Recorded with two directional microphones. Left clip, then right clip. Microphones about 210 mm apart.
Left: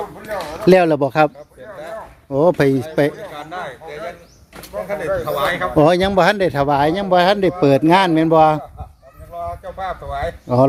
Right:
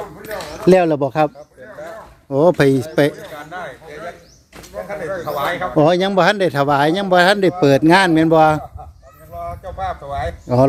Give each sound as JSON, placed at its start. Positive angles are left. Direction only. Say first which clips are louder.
{"t": 0.6, "sound": "speech", "louder": "even", "side_deg": 0}
{"t": 2.3, "sound": "speech", "louder": "right 1 dB", "side_deg": -15}
{"t": 3.3, "sound": "a sound", "louder": "left 1 dB", "side_deg": 45}
{"t": 4.9, "sound": "speech", "louder": "left 3 dB", "side_deg": 45}
{"t": 5.7, "sound": "speech", "louder": "even", "side_deg": 0}
{"t": 9.7, "sound": "speech", "louder": "right 3 dB", "side_deg": 10}